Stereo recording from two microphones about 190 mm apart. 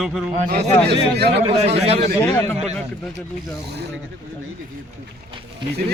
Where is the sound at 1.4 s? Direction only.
30° right (ahead or behind).